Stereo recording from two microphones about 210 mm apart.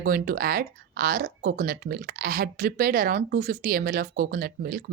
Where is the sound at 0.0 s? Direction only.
45° right (ahead or behind).